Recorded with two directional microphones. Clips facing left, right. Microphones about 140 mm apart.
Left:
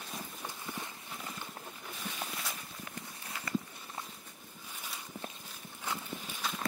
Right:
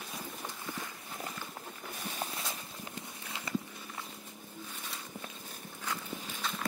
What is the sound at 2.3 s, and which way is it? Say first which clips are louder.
Walk: right 1 dB; 25° right (ahead or behind).